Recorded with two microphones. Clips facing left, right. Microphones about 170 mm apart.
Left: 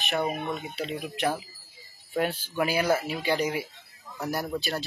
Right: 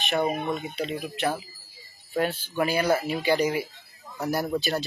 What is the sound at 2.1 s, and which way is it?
Speech, 10° left (ahead or behind).